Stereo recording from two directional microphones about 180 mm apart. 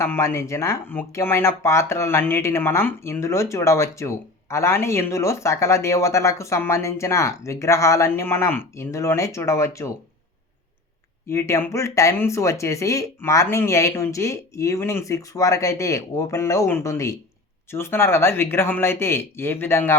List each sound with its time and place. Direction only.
0.0 s speech: 15° left (ahead or behind)
11.3 s speech: 15° left (ahead or behind)